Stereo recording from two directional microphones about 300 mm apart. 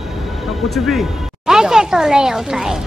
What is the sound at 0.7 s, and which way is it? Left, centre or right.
Speech, centre.